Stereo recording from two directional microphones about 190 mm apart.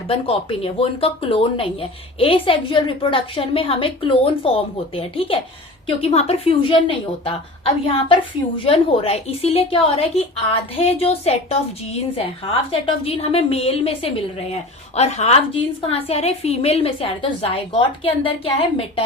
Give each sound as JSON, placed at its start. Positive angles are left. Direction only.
{"t": 0.1, "sound": "a woman's voice", "side_deg": 30}